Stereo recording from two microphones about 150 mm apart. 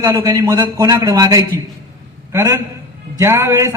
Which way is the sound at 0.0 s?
20° right (ahead or behind).